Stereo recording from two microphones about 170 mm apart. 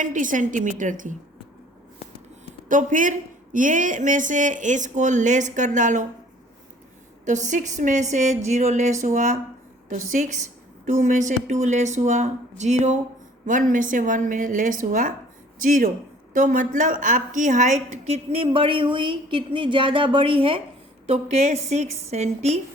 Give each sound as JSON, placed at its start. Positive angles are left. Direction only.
{"t": 0.0, "sound": "speech", "side_deg": -50}
{"t": 2.6, "sound": "speech", "side_deg": -50}
{"t": 7.3, "sound": "a woman's voice", "side_deg": -45}